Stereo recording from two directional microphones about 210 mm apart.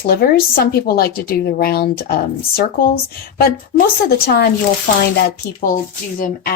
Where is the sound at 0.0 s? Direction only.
45° left (ahead or behind).